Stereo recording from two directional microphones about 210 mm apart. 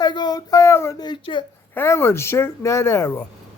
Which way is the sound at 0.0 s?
20° left (ahead or behind).